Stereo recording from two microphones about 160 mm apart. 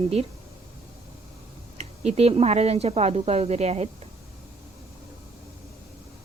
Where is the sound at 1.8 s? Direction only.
40° right (ahead or behind).